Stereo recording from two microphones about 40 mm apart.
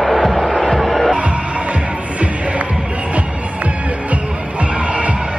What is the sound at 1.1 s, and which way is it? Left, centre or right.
Music, right.